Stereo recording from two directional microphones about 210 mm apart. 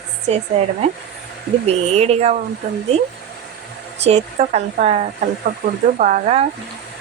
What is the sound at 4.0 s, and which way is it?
Speech, 30° right (ahead or behind).